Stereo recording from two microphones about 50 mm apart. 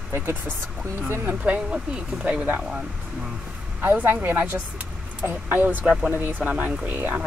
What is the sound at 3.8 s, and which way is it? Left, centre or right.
Speech, right.